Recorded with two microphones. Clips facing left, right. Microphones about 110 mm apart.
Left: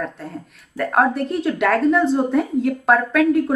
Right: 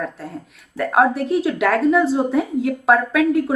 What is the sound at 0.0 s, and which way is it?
A woman's voice, centre (ahead or behind).